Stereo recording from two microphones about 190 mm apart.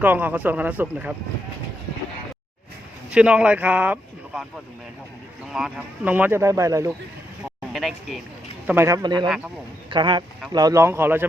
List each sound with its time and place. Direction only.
0.0 s speech: 10° right (ahead or behind)
3.1 s speech: 5° right (ahead or behind)
5.5 s speech: centre (ahead or behind)
7.7 s speech: centre (ahead or behind)
8.6 s speech: 10° right (ahead or behind)
9.2 s speech: centre (ahead or behind)
9.9 s speech: 25° right (ahead or behind)